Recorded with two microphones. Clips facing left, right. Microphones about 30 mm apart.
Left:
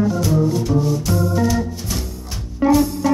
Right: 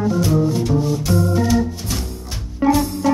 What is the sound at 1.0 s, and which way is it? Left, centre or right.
Organ, centre.